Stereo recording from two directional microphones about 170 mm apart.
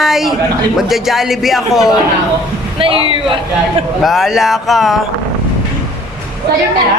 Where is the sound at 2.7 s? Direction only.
30° right (ahead or behind).